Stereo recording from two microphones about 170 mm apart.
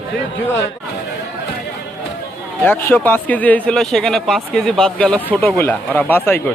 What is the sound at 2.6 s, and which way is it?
A man's voice, 10° left (ahead or behind).